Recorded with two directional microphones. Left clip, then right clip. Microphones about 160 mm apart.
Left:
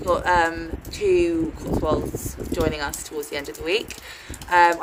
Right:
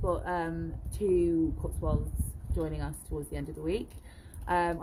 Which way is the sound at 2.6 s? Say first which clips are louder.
Left 11 dB; 15° right (ahead or behind).